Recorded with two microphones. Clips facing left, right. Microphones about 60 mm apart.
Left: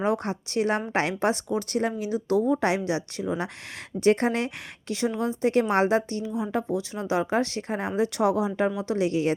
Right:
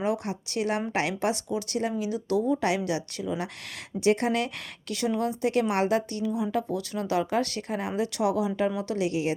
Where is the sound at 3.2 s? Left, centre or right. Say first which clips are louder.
Left 2 dB; left.